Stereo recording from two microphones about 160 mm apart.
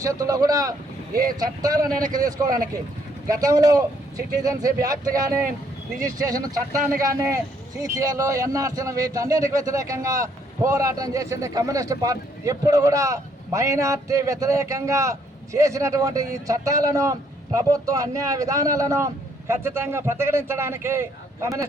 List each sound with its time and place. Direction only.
0.0 s a man's voice: 20° right (ahead or behind)
1.9 s a man's voice: 55° right (ahead or behind)
2.1 s a man's voice: 25° right (ahead or behind)